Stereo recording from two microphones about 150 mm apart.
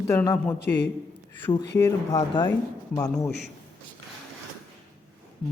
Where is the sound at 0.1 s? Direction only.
15° left (ahead or behind).